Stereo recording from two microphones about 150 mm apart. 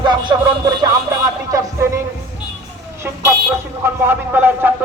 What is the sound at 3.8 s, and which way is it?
Speech, 15° right (ahead or behind).